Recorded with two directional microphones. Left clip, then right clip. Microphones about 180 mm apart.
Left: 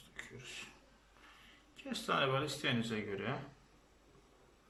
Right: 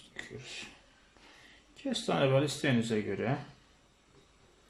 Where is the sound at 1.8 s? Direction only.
30° right (ahead or behind).